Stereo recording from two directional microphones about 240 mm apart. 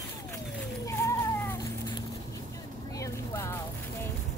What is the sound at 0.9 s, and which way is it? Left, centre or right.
Cat, centre.